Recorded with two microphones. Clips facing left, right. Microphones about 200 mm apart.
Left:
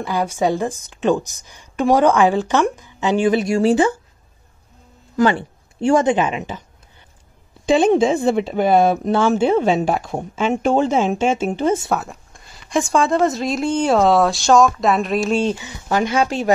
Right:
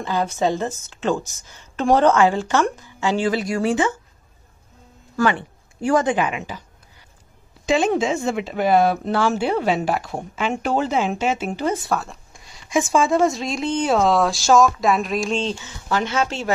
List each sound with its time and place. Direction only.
0.0 s a woman's voice: 10° left (ahead or behind); by 3.9 s 35° left (ahead or behind)
5.1 s a woman's voice: 30° left (ahead or behind)
7.6 s speech: 30° left (ahead or behind)
12.3 s speech: centre (ahead or behind); by 16.5 s 15° left (ahead or behind)